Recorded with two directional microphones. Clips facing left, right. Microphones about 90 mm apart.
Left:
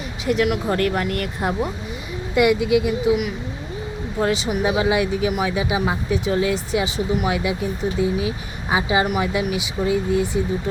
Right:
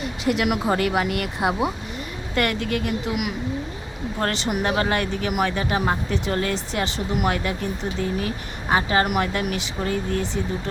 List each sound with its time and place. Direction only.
0.4 s speech: 15° right (ahead or behind)
2.3 s speech: 10° left (ahead or behind)
4.2 s speech: 5° left (ahead or behind)